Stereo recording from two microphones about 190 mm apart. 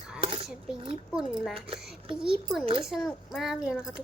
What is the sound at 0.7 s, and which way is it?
Speech, 5° right (ahead or behind).